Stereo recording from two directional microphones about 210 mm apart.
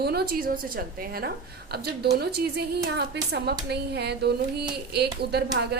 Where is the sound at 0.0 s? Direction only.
50° right (ahead or behind).